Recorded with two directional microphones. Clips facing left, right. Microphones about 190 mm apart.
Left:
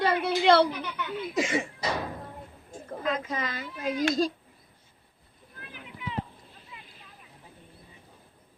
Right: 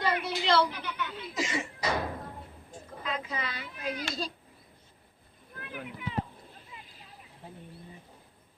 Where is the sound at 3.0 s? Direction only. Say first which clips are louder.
Left 5 dB; 45° left (ahead or behind).